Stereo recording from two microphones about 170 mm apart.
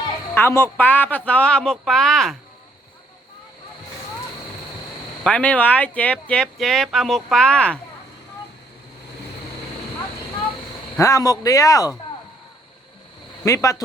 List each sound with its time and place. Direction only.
0.3 s speech: 15° left (ahead or behind)
5.2 s speech: 10° left (ahead or behind)
10.9 s speech: 20° left (ahead or behind)
13.4 s speech: 20° left (ahead or behind)